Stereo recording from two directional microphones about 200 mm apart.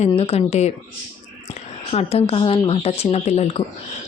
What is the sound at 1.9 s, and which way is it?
Speech, 30° left (ahead or behind).